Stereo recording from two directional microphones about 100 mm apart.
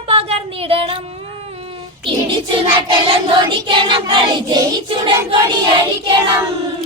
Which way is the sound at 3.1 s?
60° right (ahead or behind).